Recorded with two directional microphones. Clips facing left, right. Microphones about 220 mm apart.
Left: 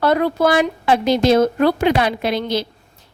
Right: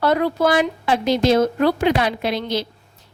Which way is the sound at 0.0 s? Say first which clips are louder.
Left 2 dB; 55° left (ahead or behind).